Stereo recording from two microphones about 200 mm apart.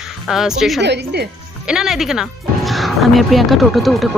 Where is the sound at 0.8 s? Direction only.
60° right (ahead or behind).